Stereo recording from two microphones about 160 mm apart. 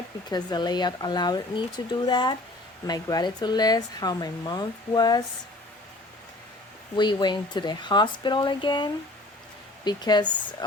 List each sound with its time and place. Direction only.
0.3 s speech: 25° left (ahead or behind)
6.9 s speech: 30° left (ahead or behind)